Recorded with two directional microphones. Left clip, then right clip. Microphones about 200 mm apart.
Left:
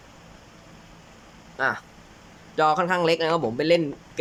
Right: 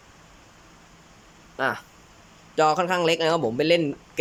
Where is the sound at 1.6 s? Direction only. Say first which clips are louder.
Left 1 dB; centre (ahead or behind).